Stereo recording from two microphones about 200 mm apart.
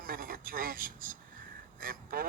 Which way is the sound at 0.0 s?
45° right (ahead or behind).